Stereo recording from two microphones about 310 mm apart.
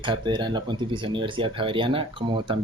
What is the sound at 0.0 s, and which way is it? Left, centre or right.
Speech, centre.